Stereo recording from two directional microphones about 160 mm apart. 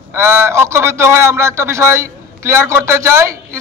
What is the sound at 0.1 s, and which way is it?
A man's voice, 15° right (ahead or behind).